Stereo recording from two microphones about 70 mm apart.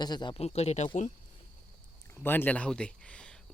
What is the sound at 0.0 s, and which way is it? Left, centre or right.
Speech, left.